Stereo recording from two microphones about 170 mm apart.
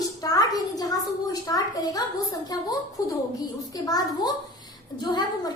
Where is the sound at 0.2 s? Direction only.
20° left (ahead or behind).